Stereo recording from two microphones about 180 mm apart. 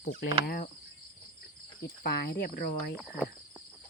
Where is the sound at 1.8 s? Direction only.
60° left (ahead or behind).